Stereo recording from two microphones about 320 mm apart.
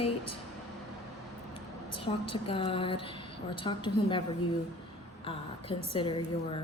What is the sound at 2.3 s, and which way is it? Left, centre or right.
Speech, centre.